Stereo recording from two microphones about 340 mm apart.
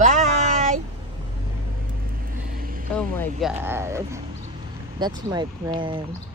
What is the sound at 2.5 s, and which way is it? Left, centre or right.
Vehicle, right.